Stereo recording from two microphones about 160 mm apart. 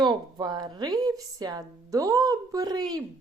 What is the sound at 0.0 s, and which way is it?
A woman's voice, 25° right (ahead or behind).